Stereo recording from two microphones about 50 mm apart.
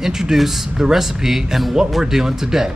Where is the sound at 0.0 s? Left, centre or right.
Centre.